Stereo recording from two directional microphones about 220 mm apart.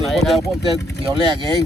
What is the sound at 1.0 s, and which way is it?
Speech, 20° right (ahead or behind).